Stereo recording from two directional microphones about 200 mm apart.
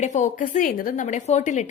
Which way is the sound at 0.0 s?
35° left (ahead or behind).